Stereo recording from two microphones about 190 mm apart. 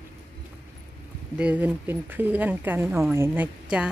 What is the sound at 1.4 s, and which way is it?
A woman's voice, 10° right (ahead or behind).